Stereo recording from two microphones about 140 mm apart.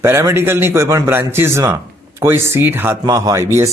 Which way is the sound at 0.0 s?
20° right (ahead or behind).